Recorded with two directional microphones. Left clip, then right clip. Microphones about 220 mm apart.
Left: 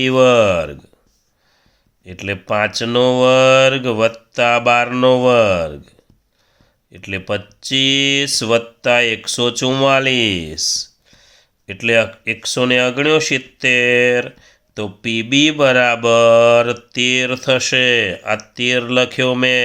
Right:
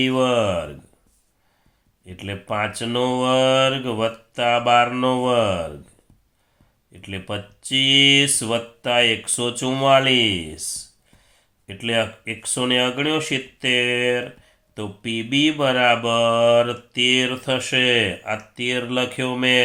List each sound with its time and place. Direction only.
0.0 s speech: 45° left (ahead or behind)
2.0 s speech: 45° left (ahead or behind)
6.9 s speech: 45° left (ahead or behind)